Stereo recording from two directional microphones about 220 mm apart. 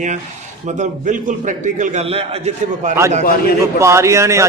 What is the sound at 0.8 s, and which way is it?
A man's voice, 35° right (ahead or behind).